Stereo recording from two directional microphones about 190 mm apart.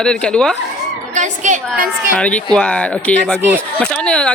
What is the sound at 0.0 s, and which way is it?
Speech, 5° left (ahead or behind).